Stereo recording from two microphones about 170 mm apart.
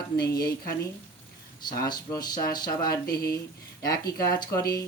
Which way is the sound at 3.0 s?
65° left (ahead or behind).